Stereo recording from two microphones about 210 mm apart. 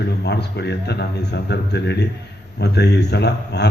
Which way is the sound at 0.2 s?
55° left (ahead or behind).